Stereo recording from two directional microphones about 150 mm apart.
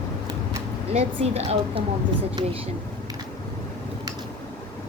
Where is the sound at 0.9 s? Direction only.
45° right (ahead or behind).